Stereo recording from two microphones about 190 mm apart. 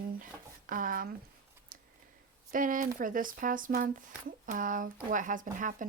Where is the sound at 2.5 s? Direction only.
45° right (ahead or behind).